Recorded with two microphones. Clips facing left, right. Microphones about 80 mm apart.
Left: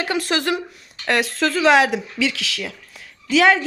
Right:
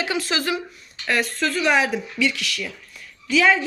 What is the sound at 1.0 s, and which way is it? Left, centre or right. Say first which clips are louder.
Speech: left 3 dB; left.